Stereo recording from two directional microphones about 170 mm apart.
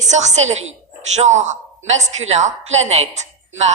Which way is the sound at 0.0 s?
45° right (ahead or behind).